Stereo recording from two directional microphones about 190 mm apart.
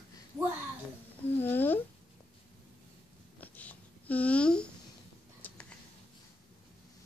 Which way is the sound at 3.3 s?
10° left (ahead or behind).